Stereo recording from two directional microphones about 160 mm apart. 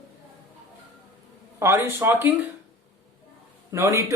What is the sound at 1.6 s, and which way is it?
Speech, 15° right (ahead or behind).